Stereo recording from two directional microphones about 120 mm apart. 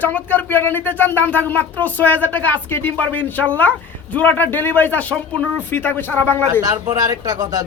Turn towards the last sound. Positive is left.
turn(degrees=-30)  # may be behind; listen again after turning